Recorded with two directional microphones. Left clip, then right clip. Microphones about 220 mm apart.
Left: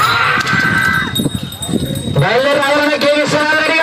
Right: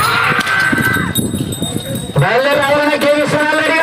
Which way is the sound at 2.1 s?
50° left (ahead or behind).